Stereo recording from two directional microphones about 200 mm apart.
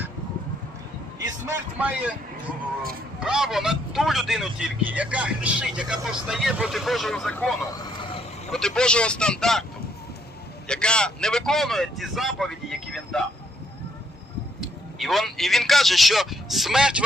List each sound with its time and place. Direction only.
1.2 s vehicle: 15° right (ahead or behind)
3.2 s speech: 5° right (ahead or behind)
8.5 s speech: 5° left (ahead or behind)
10.7 s speech: 5° left (ahead or behind)
14.6 s a man's voice: centre (ahead or behind)